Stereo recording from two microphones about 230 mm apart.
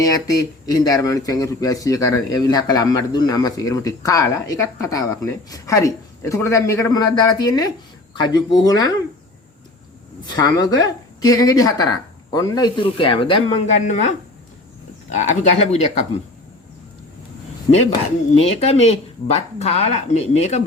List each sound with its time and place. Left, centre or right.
0.1 s speech: centre
10.3 s speech: centre
15.1 s speech: left
18.3 s speech: left